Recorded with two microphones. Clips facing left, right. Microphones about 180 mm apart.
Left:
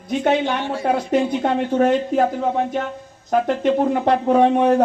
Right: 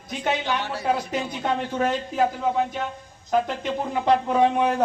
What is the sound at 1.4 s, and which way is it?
Speech, 50° left (ahead or behind).